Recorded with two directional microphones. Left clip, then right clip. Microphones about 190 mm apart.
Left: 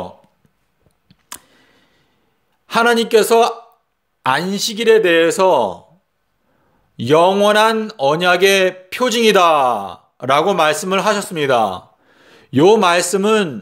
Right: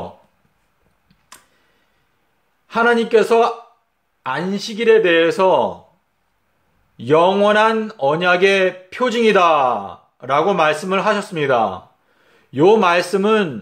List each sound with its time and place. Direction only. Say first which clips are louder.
2.6 s a man's voice: left 2 dB; 50° left (ahead or behind)
7.0 s a man's voice: left 2 dB; 50° left (ahead or behind)